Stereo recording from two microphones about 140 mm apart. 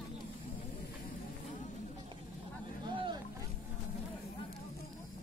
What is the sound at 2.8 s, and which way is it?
Vehicle, 30° right (ahead or behind).